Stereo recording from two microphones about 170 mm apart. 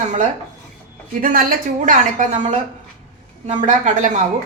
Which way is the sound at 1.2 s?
50° right (ahead or behind).